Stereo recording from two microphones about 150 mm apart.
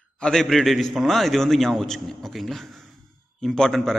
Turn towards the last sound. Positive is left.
turn(degrees=5)  # may be behind; listen again after turning